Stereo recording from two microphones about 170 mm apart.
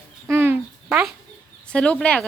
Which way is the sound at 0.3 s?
15° right (ahead or behind).